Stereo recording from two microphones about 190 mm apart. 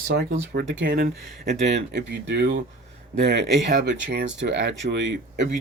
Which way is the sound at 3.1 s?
45° right (ahead or behind).